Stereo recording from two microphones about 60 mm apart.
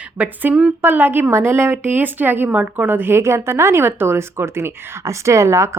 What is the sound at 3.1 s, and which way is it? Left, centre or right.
Speech, right.